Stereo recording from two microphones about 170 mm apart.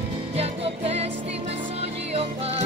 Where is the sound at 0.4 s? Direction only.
35° right (ahead or behind).